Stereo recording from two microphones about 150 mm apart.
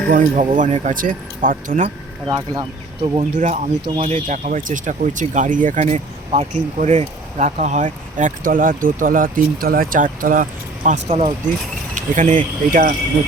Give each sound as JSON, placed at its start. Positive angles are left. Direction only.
{"t": 0.1, "sound": "speech", "side_deg": -65}
{"t": 2.2, "sound": "speech", "side_deg": -25}
{"t": 3.3, "sound": "speech", "side_deg": -55}
{"t": 5.8, "sound": "speech", "side_deg": -50}